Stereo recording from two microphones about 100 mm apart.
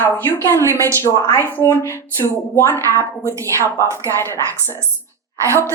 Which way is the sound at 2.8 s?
35° right (ahead or behind).